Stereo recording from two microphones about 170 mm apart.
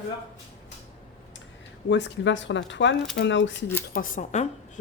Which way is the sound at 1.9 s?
90° left.